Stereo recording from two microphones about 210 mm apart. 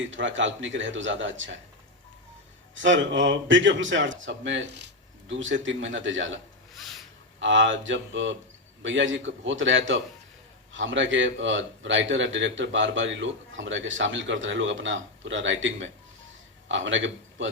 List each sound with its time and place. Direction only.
0.0 s speech: 65° right (ahead or behind)
2.7 s a man's voice: 60° right (ahead or behind)